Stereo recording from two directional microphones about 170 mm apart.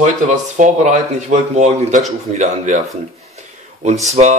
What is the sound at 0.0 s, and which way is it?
Speech, 45° right (ahead or behind).